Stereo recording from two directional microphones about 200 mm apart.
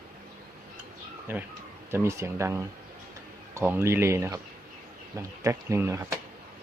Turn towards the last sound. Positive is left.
turn(degrees=-15)  # may be behind; listen again after turning